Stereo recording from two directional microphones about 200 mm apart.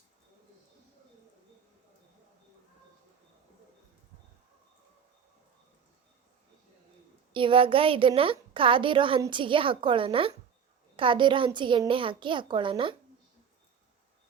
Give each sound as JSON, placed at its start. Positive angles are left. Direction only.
{"t": 7.3, "sound": "a woman's voice", "side_deg": -25}